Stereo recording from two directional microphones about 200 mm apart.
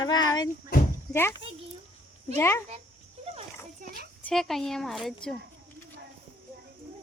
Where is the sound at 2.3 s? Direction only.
15° left (ahead or behind).